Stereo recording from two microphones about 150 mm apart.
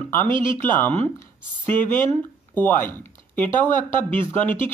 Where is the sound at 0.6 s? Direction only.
10° left (ahead or behind).